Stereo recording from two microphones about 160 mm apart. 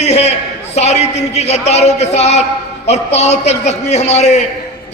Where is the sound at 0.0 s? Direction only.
45° left (ahead or behind).